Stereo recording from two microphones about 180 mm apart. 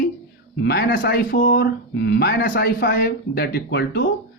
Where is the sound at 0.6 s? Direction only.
70° left (ahead or behind).